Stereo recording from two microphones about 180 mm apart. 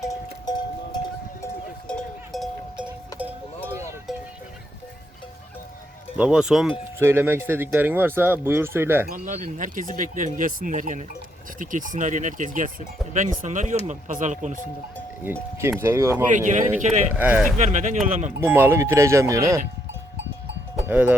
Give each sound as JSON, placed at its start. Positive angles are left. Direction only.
{"t": 0.0, "sound": "music", "side_deg": 20}
{"t": 3.2, "sound": "cowbell", "side_deg": -10}
{"t": 6.1, "sound": "speech", "side_deg": -5}
{"t": 9.0, "sound": "speech", "side_deg": -50}
{"t": 15.2, "sound": "speech", "side_deg": -10}
{"t": 16.3, "sound": "speech", "side_deg": -45}
{"t": 17.2, "sound": "speech", "side_deg": -10}
{"t": 17.6, "sound": "speech", "side_deg": -40}
{"t": 18.3, "sound": "speech", "side_deg": -10}
{"t": 20.8, "sound": "speech", "side_deg": -5}